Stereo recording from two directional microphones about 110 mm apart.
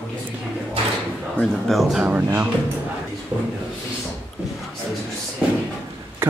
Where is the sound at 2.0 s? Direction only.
15° right (ahead or behind).